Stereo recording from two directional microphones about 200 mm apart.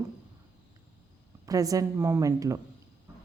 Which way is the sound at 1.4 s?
15° right (ahead or behind).